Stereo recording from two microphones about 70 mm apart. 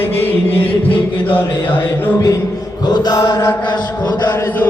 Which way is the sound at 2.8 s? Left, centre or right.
Left.